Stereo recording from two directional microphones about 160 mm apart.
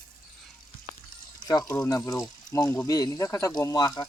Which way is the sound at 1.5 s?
25° left (ahead or behind).